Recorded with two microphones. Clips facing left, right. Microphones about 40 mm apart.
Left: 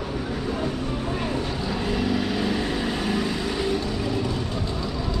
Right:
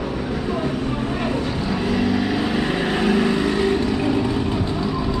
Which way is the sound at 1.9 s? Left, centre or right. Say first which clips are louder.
Right 4 dB; centre.